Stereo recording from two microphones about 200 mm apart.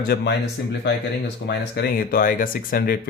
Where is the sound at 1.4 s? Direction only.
55° left (ahead or behind).